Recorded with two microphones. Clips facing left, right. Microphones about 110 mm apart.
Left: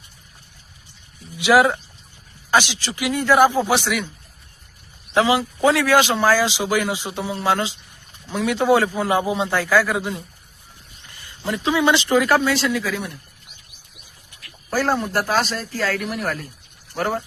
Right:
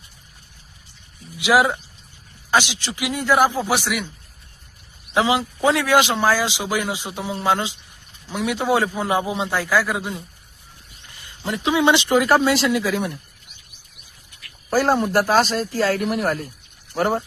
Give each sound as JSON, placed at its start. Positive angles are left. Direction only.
{"t": 1.4, "sound": "speech", "side_deg": -15}
{"t": 5.1, "sound": "speech", "side_deg": -20}
{"t": 11.2, "sound": "speech", "side_deg": -20}
{"t": 14.7, "sound": "speech", "side_deg": -20}